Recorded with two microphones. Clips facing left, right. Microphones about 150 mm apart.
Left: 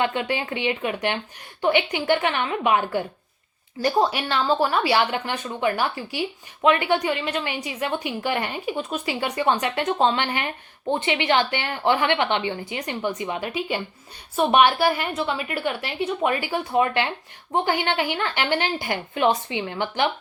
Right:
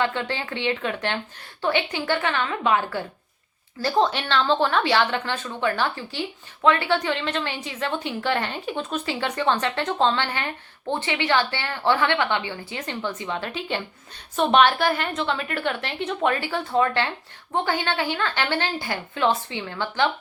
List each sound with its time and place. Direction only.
0.0 s a woman's voice: 15° left (ahead or behind)